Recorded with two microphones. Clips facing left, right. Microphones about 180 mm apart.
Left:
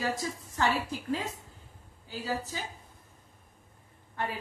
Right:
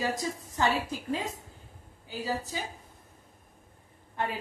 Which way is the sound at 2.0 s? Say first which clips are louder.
Right 1 dB; 15° right (ahead or behind).